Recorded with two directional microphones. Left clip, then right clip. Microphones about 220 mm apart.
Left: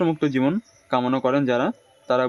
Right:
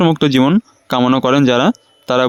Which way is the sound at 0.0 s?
45° right (ahead or behind).